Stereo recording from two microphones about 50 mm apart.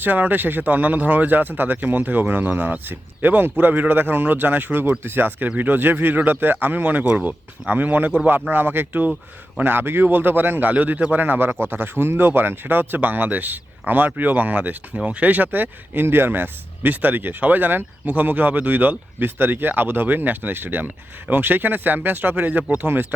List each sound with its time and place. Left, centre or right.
0.0 s speech: right
8.9 s speech: right
9.6 s speech: right
22.6 s speech: right